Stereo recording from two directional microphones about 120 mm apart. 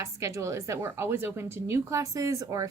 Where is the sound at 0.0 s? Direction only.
25° right (ahead or behind).